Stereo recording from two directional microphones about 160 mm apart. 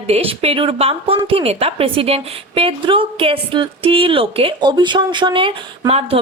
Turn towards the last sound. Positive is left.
turn(degrees=-40)  # may be behind; listen again after turning